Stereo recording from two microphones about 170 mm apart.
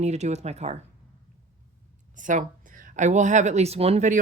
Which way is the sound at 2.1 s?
50° right (ahead or behind).